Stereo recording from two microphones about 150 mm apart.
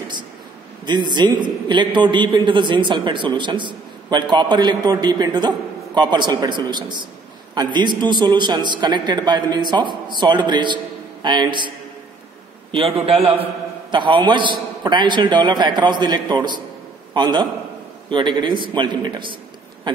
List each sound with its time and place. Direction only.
0.8 s a man's voice: 30° right (ahead or behind)
12.7 s a man's voice: 40° right (ahead or behind)